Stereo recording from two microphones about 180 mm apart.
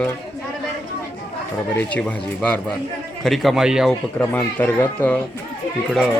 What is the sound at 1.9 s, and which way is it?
A man's voice, 5° left (ahead or behind).